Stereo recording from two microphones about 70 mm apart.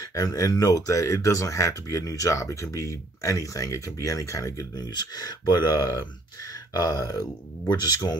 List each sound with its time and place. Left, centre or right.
0.1 s speech: left
7.7 s speech: left